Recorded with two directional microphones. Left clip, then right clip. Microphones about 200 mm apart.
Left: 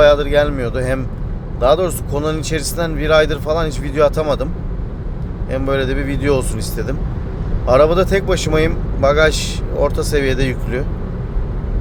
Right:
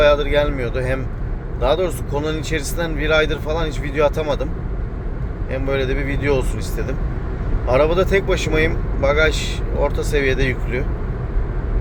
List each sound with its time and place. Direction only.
0.0 s speech: 20° left (ahead or behind)
5.5 s speech: 25° left (ahead or behind)